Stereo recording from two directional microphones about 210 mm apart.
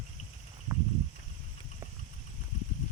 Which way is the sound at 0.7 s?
15° right (ahead or behind).